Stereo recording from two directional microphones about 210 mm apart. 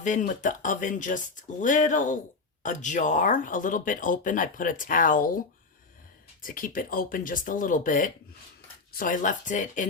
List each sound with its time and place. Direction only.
0.0 s speech: 35° left (ahead or behind)
6.4 s speech: 40° left (ahead or behind)